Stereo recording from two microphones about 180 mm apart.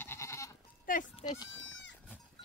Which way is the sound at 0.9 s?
50° left (ahead or behind).